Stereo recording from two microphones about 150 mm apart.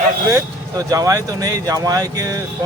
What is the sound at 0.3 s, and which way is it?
Speech, 20° right (ahead or behind).